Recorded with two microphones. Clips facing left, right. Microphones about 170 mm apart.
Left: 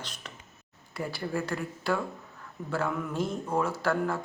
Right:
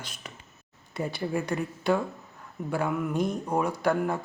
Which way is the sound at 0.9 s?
20° right (ahead or behind).